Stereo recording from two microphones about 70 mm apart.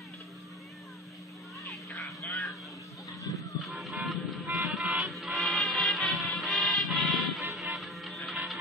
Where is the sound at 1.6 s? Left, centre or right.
Left.